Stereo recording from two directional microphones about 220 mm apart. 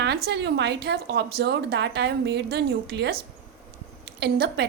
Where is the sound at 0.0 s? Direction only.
50° right (ahead or behind).